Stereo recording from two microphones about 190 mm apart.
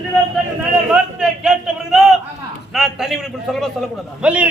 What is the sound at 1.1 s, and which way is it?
A man's voice, 5° right (ahead or behind).